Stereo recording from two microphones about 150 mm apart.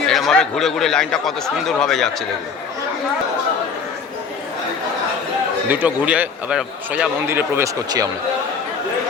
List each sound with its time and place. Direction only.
0.1 s speech: centre (ahead or behind)
5.7 s speech: 10° right (ahead or behind)
7.3 s speech: 15° right (ahead or behind)